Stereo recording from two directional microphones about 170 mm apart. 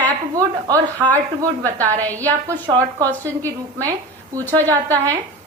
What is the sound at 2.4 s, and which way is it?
Speech, 20° right (ahead or behind).